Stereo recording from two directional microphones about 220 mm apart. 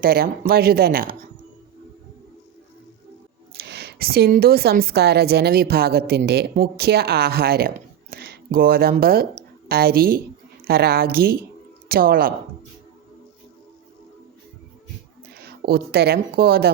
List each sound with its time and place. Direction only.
0.0 s a woman's voice: 40° right (ahead or behind)
3.6 s a woman's voice: 45° right (ahead or behind)
15.3 s speech: 45° right (ahead or behind)